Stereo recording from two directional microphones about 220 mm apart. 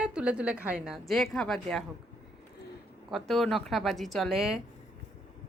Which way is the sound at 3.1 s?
Centre (ahead or behind).